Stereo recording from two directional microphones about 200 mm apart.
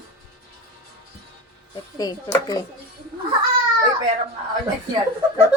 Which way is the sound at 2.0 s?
20° left (ahead or behind).